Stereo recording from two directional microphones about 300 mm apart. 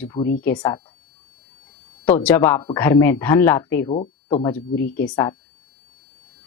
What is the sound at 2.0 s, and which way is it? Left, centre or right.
A woman's voice, centre.